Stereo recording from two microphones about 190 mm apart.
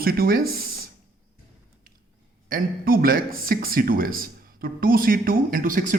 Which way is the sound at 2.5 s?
50° right (ahead or behind).